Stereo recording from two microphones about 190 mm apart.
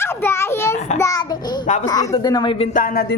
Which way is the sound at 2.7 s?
50° left (ahead or behind).